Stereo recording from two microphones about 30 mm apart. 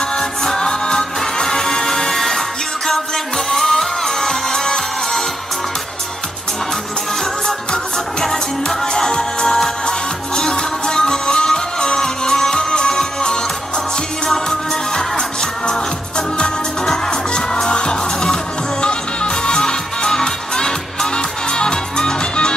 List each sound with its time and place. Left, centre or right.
0.1 s music: centre
3.5 s music: centre
7.4 s music: left
15.0 s music: left
20.1 s music: left